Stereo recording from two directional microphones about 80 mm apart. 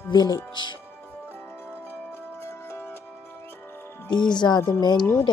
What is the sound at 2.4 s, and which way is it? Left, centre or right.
Music, left.